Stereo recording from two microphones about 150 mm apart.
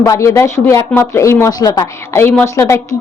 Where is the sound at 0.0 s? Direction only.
20° left (ahead or behind).